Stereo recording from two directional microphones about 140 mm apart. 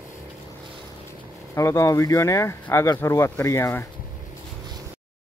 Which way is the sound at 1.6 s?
20° left (ahead or behind).